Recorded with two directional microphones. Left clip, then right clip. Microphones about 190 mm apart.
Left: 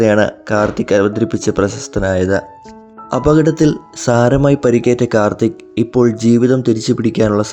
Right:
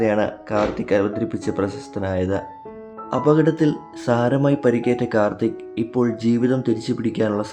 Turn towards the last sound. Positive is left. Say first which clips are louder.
# left 8 dB
turn(degrees=30)  # may be behind; listen again after turning